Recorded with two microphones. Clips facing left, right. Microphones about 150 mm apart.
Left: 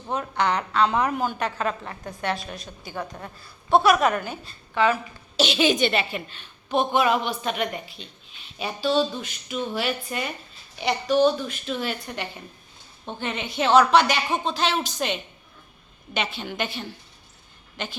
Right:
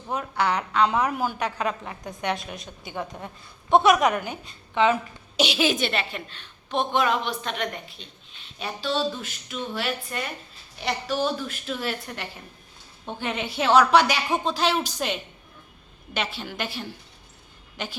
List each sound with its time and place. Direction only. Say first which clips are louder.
0.1 s a woman's voice: left 1 dB; 10° right (ahead or behind)
5.4 s a woman's voice: left 2 dB; 5° right (ahead or behind)